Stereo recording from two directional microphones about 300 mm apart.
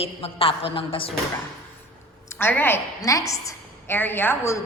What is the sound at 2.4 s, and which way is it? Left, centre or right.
A woman's voice, centre.